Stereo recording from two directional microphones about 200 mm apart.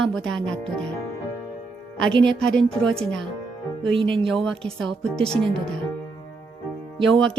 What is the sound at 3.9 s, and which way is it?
Speech, 25° right (ahead or behind).